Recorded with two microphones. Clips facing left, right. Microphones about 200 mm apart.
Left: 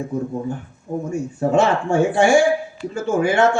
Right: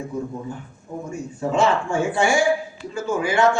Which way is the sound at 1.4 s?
50° left (ahead or behind).